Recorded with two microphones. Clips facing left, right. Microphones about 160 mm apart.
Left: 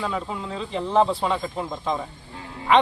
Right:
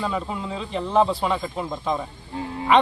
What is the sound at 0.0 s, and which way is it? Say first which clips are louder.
A man's voice: right 1 dB; 5° right (ahead or behind).